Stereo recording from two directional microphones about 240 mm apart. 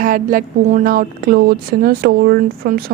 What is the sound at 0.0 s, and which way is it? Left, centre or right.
A woman's voice, right.